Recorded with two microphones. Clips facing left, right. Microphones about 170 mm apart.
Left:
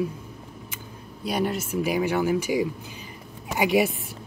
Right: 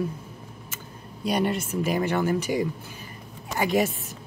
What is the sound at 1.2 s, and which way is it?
Speech, centre (ahead or behind).